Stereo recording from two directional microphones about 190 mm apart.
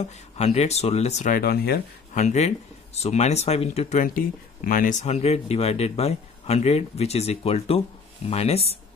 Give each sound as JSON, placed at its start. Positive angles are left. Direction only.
{"t": 0.0, "sound": "speech", "side_deg": 35}
{"t": 2.1, "sound": "speech", "side_deg": 35}